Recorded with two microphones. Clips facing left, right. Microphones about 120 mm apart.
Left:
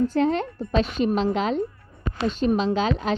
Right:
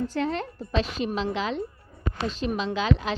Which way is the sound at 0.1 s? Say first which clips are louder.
Left 6 dB; 40° left (ahead or behind).